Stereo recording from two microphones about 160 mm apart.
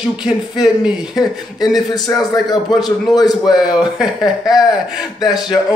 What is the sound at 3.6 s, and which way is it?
Speech, 5° right (ahead or behind).